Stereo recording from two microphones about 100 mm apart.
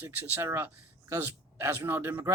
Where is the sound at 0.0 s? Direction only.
20° right (ahead or behind).